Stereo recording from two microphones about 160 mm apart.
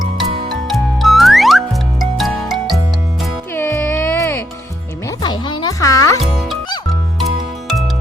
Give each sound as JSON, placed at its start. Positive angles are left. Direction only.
{"t": 0.2, "sound": "music", "side_deg": 0}
{"t": 3.5, "sound": "music", "side_deg": 15}
{"t": 5.2, "sound": "music", "side_deg": 30}
{"t": 7.3, "sound": "music", "side_deg": 0}